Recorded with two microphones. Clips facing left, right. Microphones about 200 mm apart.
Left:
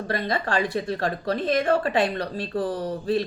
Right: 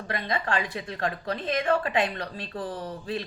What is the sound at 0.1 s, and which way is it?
A woman's voice, 35° left (ahead or behind).